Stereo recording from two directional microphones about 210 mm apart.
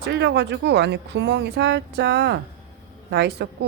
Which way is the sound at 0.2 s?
55° right (ahead or behind).